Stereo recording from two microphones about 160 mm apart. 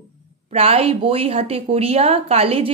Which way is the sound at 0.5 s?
40° right (ahead or behind).